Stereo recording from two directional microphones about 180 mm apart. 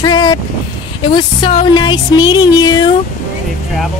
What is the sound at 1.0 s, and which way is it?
Music, 25° left (ahead or behind).